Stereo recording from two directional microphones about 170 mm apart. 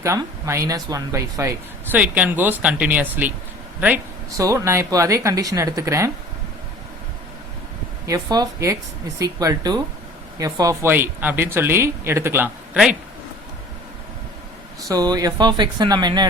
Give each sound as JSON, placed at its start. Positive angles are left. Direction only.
{"t": 0.0, "sound": "speech", "side_deg": -15}
{"t": 4.3, "sound": "speech", "side_deg": -20}
{"t": 8.0, "sound": "speech", "side_deg": -20}
{"t": 14.8, "sound": "speech", "side_deg": -20}